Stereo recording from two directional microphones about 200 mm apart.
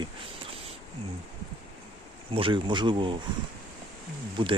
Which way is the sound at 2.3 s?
25° right (ahead or behind).